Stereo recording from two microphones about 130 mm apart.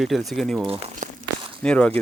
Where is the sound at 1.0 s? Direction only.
70° right (ahead or behind).